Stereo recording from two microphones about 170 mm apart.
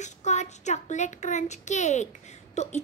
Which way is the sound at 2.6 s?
40° left (ahead or behind).